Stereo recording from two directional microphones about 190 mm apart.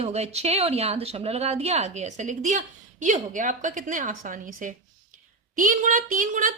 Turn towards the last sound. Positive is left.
turn(degrees=-45)  # may be behind; listen again after turning